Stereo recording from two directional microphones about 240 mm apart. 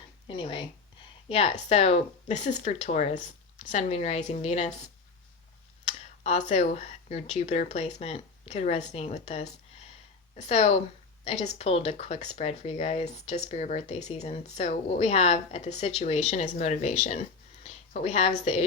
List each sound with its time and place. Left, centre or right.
0.3 s speech: left
5.8 s a woman's voice: left